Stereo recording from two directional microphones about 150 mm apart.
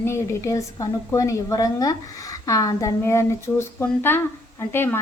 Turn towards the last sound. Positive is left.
turn(degrees=15)  # may be behind; listen again after turning